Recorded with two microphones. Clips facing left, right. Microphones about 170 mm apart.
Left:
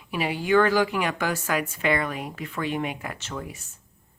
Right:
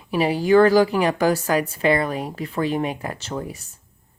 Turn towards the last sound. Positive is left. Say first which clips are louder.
# right 6 dB
turn(degrees=-35)  # may be behind; listen again after turning